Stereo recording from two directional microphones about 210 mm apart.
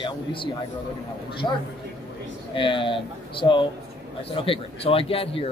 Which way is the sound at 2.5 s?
25° left (ahead or behind).